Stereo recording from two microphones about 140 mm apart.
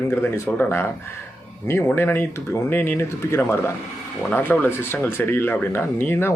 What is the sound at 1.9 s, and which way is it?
Speech, 15° left (ahead or behind).